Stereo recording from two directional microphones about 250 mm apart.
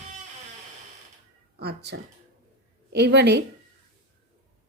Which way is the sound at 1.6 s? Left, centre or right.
Right.